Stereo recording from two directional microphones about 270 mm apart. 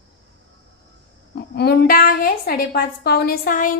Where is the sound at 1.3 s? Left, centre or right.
Left.